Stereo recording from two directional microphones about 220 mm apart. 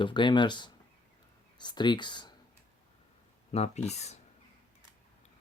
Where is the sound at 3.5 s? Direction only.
30° left (ahead or behind).